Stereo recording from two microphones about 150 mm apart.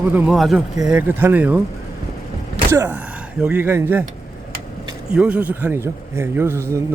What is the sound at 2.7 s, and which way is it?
Speech, 20° right (ahead or behind).